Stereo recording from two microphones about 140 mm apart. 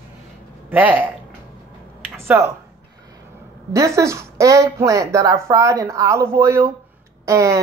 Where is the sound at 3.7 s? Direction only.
20° right (ahead or behind).